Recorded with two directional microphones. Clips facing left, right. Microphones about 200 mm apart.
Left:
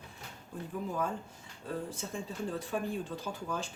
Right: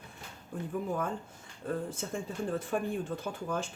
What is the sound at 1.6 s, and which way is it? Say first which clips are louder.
Speech: right 3 dB; 50° right (ahead or behind).